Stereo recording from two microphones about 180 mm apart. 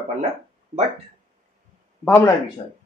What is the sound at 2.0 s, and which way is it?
Speech, 10° left (ahead or behind).